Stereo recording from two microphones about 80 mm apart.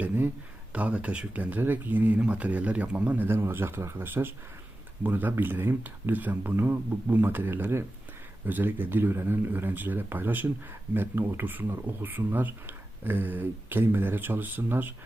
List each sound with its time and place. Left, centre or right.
0.7 s speech: centre
3.2 s speech: right